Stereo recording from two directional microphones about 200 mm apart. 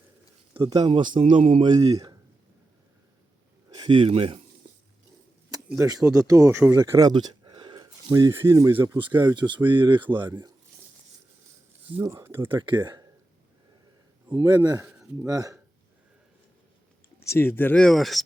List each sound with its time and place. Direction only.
0.5 s speech: 25° right (ahead or behind)
1.8 s speech: 20° right (ahead or behind)
3.8 s speech: 25° right (ahead or behind)
5.6 s speech: 15° right (ahead or behind)
11.9 s speech: 15° right (ahead or behind)
12.5 s speech: 20° right (ahead or behind)
14.3 s speech: 20° right (ahead or behind)
17.2 s speech: 10° left (ahead or behind)